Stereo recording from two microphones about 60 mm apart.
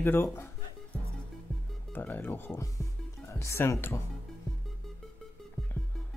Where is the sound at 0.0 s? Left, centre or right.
Left.